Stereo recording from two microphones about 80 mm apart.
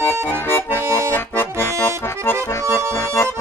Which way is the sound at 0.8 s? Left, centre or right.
Right.